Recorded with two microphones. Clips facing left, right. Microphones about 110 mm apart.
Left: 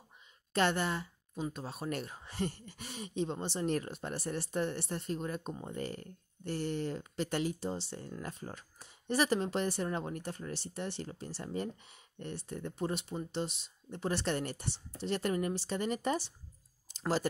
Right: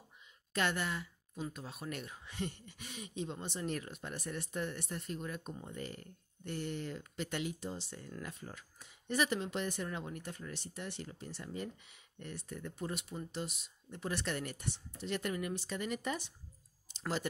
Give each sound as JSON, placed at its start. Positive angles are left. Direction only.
{"t": 0.5, "sound": "speech", "side_deg": 30}